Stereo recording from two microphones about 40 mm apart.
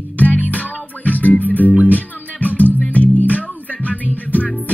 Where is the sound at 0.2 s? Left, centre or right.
Left.